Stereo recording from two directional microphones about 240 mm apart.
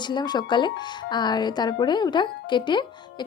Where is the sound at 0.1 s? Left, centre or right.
Centre.